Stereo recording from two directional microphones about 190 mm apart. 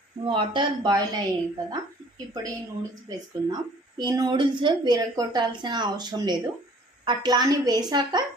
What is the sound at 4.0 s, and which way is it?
A woman's voice, 20° right (ahead or behind).